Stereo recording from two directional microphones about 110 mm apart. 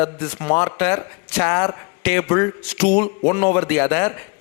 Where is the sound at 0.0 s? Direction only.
25° left (ahead or behind).